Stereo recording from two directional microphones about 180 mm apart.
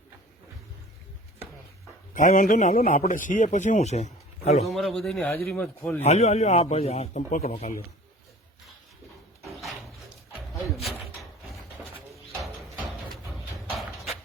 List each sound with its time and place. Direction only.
2.1 s a man's voice: 50° left (ahead or behind)
4.6 s a man's voice: centre (ahead or behind)
6.0 s a man's voice: 35° left (ahead or behind)
9.5 s a sound: centre (ahead or behind)
13.7 s clip-clop: centre (ahead or behind)